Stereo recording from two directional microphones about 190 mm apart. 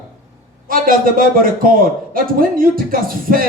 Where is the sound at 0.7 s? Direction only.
50° right (ahead or behind).